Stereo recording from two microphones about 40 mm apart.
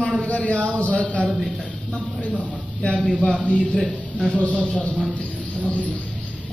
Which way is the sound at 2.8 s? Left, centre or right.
Centre.